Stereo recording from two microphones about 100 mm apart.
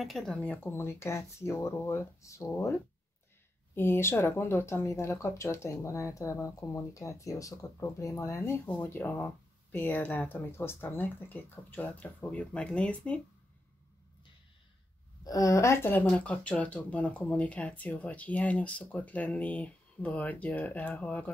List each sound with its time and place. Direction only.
0.0 s speech: 5° left (ahead or behind); by 2.5 s 30° left (ahead or behind)
3.7 s speech: 20° left (ahead or behind)
8.6 s speech: 15° left (ahead or behind)
15.2 s a woman's voice: 35° left (ahead or behind)
16.1 s speech: 10° left (ahead or behind)